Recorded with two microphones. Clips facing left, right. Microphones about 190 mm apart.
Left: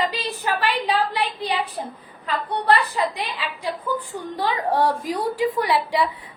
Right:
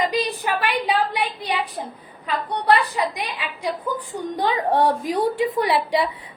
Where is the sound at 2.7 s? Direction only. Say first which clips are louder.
Right 1 dB; 15° right (ahead or behind).